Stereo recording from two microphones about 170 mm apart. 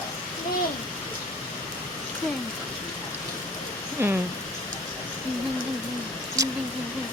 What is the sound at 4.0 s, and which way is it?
Speech, 15° right (ahead or behind).